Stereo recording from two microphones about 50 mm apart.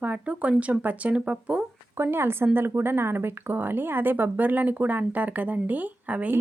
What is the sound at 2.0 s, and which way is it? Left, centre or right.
Speech, right.